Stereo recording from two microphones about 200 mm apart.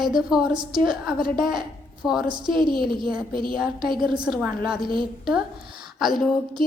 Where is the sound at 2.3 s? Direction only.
20° right (ahead or behind).